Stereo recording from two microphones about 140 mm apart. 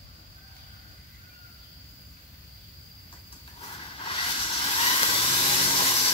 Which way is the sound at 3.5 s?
40° left (ahead or behind).